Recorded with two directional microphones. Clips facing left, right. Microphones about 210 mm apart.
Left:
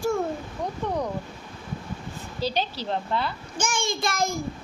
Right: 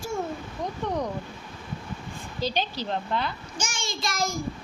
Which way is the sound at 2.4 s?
35° left (ahead or behind).